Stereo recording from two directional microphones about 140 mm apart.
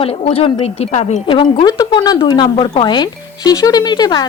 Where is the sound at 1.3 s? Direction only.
35° left (ahead or behind).